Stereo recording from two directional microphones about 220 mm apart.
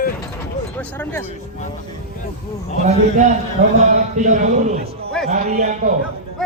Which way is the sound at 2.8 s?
35° right (ahead or behind).